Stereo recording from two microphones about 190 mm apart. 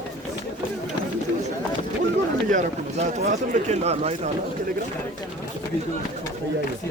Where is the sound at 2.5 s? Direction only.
40° right (ahead or behind).